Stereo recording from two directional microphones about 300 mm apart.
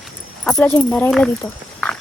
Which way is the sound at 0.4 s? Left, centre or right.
Centre.